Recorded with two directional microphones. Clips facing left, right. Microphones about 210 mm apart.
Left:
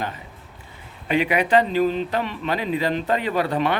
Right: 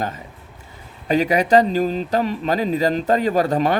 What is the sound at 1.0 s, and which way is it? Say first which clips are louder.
A man's voice: right 3 dB; 40° right (ahead or behind).